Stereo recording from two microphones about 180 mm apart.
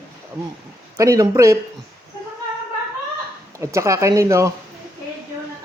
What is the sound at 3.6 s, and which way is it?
Speech, 15° right (ahead or behind).